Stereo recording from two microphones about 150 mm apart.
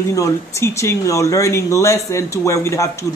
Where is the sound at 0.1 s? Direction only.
20° left (ahead or behind).